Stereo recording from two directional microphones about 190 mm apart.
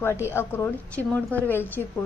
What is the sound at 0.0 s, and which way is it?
A woman's voice, 10° left (ahead or behind).